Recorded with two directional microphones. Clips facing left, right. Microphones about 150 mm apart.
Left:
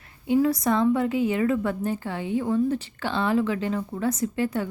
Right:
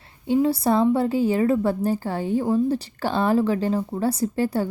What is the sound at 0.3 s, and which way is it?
A woman's voice, 30° right (ahead or behind).